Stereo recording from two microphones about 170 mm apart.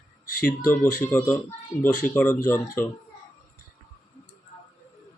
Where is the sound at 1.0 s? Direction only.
15° left (ahead or behind).